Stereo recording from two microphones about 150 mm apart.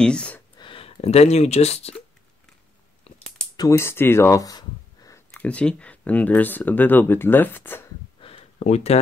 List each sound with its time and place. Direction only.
0.0 s a sound: 5° left (ahead or behind)
0.6 s speech: 35° left (ahead or behind)
3.1 s typing: 40° left (ahead or behind)
3.5 s speech: 20° left (ahead or behind)
5.3 s speech: 10° left (ahead or behind)
8.2 s a sound: 40° left (ahead or behind)